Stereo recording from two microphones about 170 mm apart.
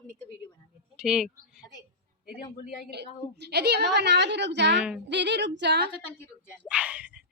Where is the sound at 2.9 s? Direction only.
75° right (ahead or behind).